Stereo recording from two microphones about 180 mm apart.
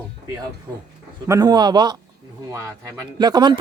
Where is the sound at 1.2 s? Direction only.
20° right (ahead or behind).